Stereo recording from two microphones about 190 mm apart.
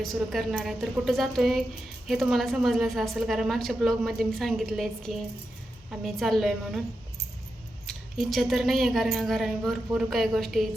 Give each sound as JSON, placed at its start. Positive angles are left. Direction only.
{"t": 0.0, "sound": "a woman's voice", "side_deg": 0}
{"t": 7.9, "sound": "a woman's voice", "side_deg": 0}